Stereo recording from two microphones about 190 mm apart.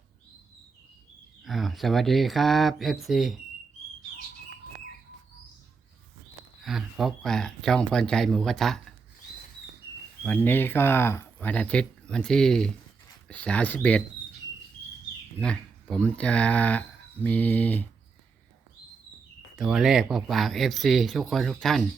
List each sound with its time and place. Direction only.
1.5 s speech: centre (ahead or behind)
6.7 s speech: centre (ahead or behind)
10.2 s speech: 10° left (ahead or behind)
15.4 s speech: 5° left (ahead or behind)
19.5 s speech: centre (ahead or behind)